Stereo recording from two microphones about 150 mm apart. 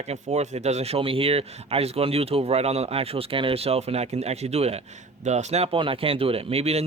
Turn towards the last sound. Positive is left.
turn(degrees=-45)  # may be behind; listen again after turning